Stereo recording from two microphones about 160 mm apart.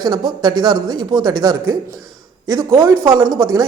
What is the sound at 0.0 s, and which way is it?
A man's voice, 25° right (ahead or behind).